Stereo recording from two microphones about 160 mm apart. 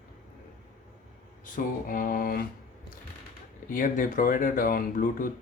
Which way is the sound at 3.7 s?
55° left (ahead or behind).